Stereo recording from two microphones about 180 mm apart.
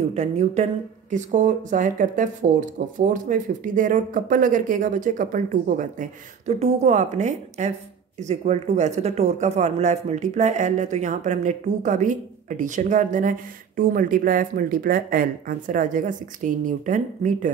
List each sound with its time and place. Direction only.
0.1 s a woman's voice: 40° right (ahead or behind)